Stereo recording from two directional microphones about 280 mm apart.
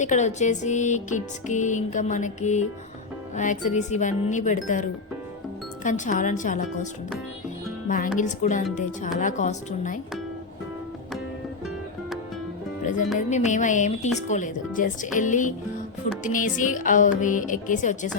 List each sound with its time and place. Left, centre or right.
0.0 s music: left
7.9 s music: left
12.8 s music: left